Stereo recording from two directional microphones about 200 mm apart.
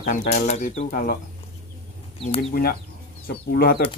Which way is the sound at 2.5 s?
50° left (ahead or behind).